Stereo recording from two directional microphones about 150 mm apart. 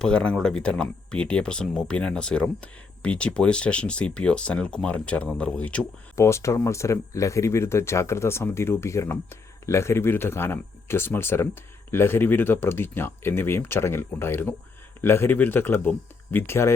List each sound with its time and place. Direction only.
0.0 s speech: 5° left (ahead or behind)
6.1 s speech: 20° left (ahead or behind)